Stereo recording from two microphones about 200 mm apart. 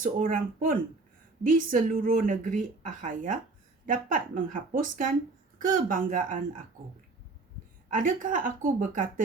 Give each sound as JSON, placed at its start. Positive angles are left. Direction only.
{"t": 0.0, "sound": "speech", "side_deg": -45}
{"t": 7.9, "sound": "a woman's voice", "side_deg": -40}